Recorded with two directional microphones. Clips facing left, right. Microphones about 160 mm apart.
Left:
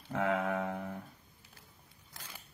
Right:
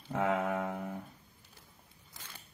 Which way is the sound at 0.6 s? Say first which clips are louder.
Even; 20° right (ahead or behind).